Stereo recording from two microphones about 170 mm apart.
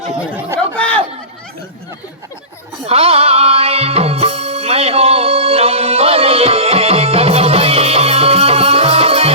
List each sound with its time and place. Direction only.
0.0 s speech: 10° right (ahead or behind)
0.8 s a sound: 10° left (ahead or behind)
2.8 s music: 35° right (ahead or behind)